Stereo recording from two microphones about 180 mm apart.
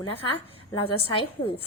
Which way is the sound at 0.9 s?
30° left (ahead or behind).